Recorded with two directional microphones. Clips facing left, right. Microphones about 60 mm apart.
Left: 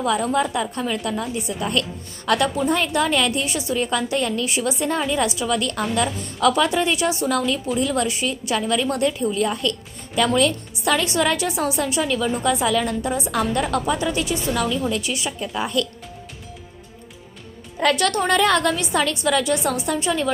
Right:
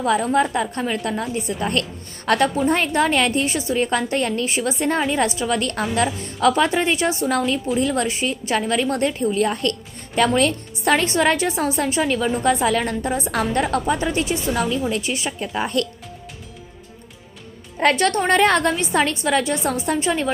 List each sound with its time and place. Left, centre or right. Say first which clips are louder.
0.4 s a woman's voice: right 1 dB; right
17.7 s a woman's voice: right 2 dB; right